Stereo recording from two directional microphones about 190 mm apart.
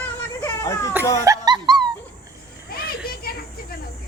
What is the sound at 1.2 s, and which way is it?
Laughter, 20° right (ahead or behind).